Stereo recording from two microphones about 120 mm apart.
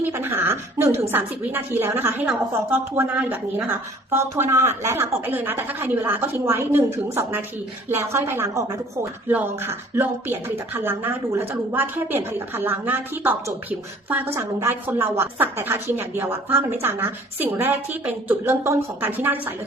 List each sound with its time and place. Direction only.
0.0 s a woman's voice: 20° right (ahead or behind)